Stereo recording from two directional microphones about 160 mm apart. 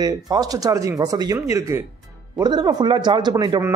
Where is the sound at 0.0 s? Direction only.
25° right (ahead or behind).